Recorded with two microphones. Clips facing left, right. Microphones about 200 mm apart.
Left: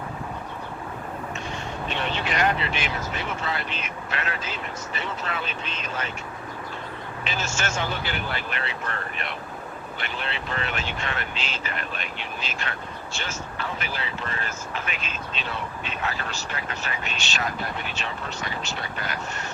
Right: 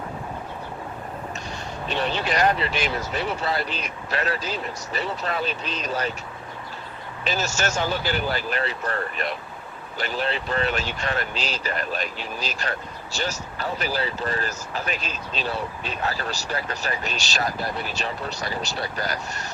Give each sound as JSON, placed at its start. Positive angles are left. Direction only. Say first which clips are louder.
{"t": 1.9, "sound": "speech", "louder": "right 4 dB", "side_deg": -35}
{"t": 7.3, "sound": "speech", "louder": "right 5 dB", "side_deg": -40}